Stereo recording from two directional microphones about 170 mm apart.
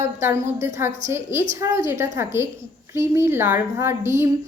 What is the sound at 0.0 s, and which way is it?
A woman's voice, 15° right (ahead or behind).